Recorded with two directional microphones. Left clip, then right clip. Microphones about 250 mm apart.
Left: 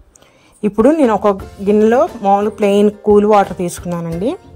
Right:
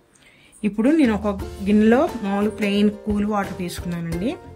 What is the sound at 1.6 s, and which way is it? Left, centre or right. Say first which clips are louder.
Music: left 7 dB; centre.